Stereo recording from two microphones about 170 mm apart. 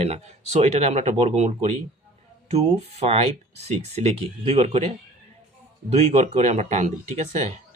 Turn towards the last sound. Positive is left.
turn(degrees=-45)  # may be behind; listen again after turning